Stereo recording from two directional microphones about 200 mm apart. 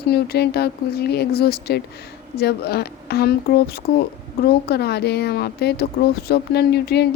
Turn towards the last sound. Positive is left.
turn(degrees=55)  # may be behind; listen again after turning